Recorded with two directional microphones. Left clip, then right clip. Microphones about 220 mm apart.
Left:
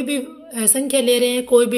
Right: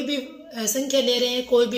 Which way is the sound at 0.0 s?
45° left (ahead or behind).